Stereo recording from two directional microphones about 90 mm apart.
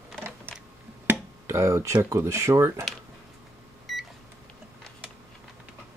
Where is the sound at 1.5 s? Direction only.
30° right (ahead or behind).